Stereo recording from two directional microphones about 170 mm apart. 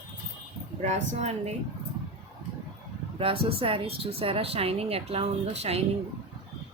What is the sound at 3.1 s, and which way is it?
Speech, 30° right (ahead or behind).